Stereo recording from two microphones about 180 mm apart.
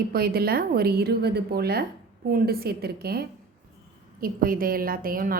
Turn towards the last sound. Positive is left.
turn(degrees=-50)  # may be behind; listen again after turning